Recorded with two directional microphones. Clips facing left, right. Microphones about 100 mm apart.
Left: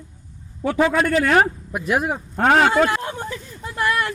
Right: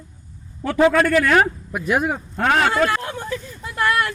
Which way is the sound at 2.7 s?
25° left (ahead or behind).